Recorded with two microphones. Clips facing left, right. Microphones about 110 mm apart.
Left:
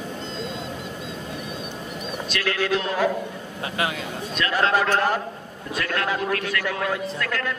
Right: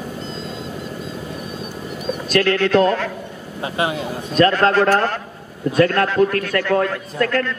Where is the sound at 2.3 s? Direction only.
50° right (ahead or behind).